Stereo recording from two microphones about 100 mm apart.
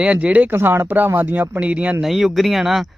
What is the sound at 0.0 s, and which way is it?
Speech, 10° right (ahead or behind).